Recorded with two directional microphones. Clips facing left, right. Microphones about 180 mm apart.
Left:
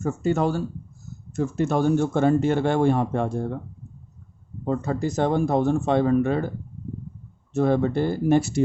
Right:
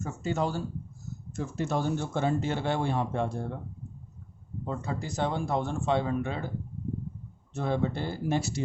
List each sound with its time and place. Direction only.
0.0 s speech: 55° left (ahead or behind)
4.6 s speech: 50° left (ahead or behind)
7.5 s speech: 50° left (ahead or behind)